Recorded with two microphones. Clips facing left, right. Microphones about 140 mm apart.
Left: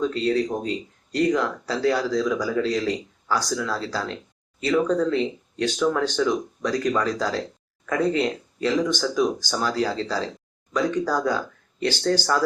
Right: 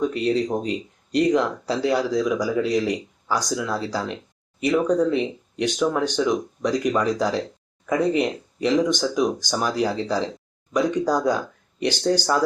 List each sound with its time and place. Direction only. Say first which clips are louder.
0.0 s speech: right 1 dB; 15° right (ahead or behind)